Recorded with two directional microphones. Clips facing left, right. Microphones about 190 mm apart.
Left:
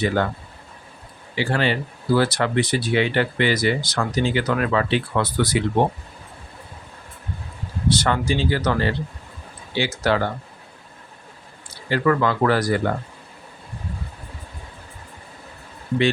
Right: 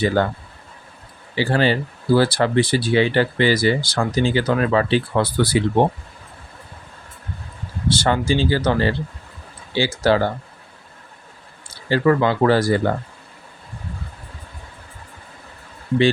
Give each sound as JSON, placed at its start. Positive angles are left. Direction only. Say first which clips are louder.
{"t": 0.2, "sound": "speech", "louder": "right 4 dB", "side_deg": -35}
{"t": 1.4, "sound": "speech", "louder": "right 3 dB", "side_deg": -35}
{"t": 7.9, "sound": "speech", "louder": "right 2 dB", "side_deg": -30}
{"t": 11.9, "sound": "speech", "louder": "right 3 dB", "side_deg": -30}